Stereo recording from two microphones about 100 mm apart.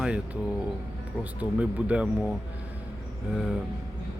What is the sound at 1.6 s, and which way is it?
Speech, 15° right (ahead or behind).